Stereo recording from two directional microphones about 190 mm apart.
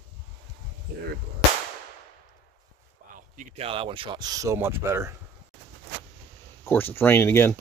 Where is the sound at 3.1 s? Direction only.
40° right (ahead or behind); by 5.1 s 15° right (ahead or behind).